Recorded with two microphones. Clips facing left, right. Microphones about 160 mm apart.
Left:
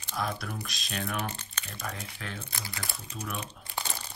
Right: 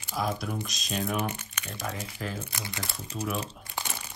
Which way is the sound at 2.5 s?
20° right (ahead or behind).